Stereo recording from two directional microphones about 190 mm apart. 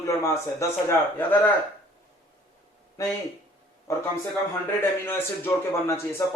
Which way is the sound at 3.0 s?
15° left (ahead or behind).